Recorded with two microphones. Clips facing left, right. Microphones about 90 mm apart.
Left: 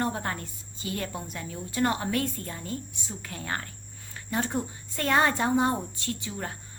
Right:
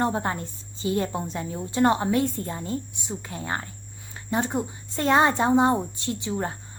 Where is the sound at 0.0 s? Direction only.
20° right (ahead or behind).